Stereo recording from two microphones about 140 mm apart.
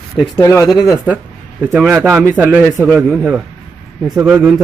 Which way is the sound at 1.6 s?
5° right (ahead or behind).